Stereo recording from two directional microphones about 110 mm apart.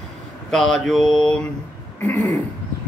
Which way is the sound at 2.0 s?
15° left (ahead or behind).